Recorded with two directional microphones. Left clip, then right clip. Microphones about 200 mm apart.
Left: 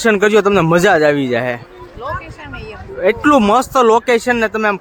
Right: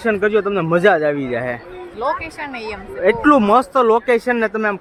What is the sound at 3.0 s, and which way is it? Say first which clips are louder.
Speech: left 1 dB; 10° left (ahead or behind).